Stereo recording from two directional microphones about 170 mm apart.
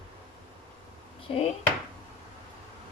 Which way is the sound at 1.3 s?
35° left (ahead or behind).